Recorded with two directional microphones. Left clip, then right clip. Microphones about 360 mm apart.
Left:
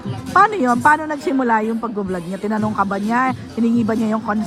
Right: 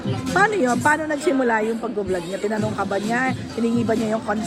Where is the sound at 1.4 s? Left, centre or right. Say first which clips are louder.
Left 2 dB; centre.